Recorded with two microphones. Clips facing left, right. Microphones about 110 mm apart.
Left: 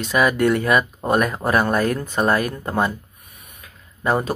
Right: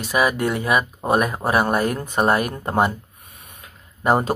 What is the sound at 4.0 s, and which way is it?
Speech, 30° right (ahead or behind).